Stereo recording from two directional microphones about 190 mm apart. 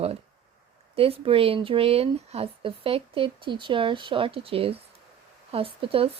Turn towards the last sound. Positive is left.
turn(degrees=-30)  # may be behind; listen again after turning